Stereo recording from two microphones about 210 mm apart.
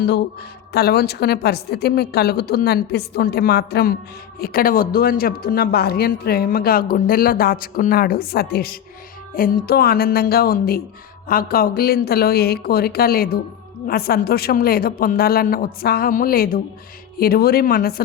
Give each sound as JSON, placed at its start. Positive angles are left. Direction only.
{"t": 0.0, "sound": "speech", "side_deg": 50}